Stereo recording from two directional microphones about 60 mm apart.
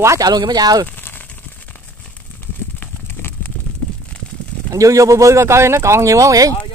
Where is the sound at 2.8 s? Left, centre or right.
Left.